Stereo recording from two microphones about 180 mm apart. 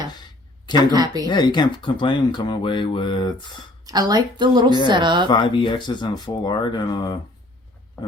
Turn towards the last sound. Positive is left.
turn(degrees=25)  # may be behind; listen again after turning